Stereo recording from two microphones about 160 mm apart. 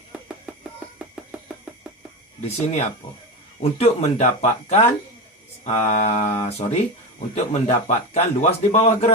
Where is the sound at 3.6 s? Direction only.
40° left (ahead or behind).